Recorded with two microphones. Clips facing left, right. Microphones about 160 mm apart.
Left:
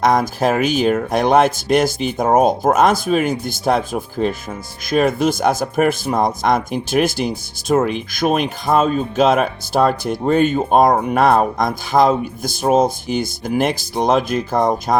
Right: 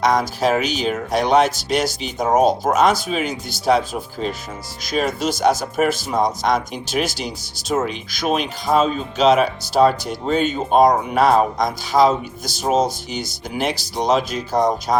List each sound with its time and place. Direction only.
0.0 s speech: 50° left (ahead or behind)